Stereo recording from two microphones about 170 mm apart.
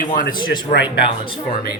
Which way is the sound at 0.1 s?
50° left (ahead or behind).